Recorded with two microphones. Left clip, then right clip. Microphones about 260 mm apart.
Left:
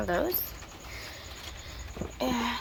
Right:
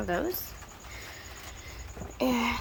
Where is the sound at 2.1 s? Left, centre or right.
Right.